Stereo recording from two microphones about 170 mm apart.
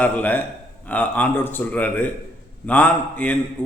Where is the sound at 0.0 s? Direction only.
10° left (ahead or behind).